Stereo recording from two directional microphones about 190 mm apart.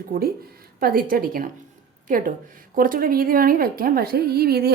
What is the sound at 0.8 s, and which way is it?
A woman's voice, 50° right (ahead or behind).